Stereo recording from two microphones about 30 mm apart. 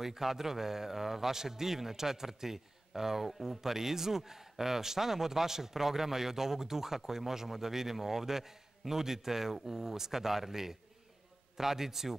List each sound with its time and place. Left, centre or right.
0.0 s a man's voice: centre